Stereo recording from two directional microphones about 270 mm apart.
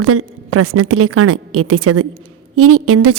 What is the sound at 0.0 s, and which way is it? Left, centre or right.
A woman's voice, right.